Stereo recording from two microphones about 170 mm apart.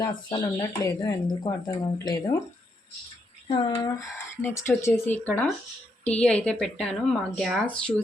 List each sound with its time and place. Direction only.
0.3 s speech: 25° left (ahead or behind)
3.5 s speech: 20° left (ahead or behind); by 7.9 s centre (ahead or behind)